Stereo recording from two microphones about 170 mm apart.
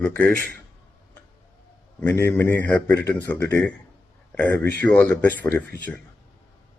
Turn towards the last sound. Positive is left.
turn(degrees=10)  # may be behind; listen again after turning